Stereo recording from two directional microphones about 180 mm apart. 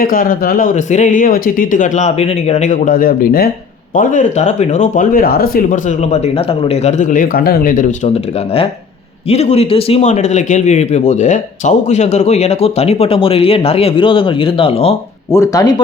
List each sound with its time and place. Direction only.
0.0 s speech: 50° left (ahead or behind)
9.3 s speech: 35° left (ahead or behind)
15.3 s speech: 15° left (ahead or behind)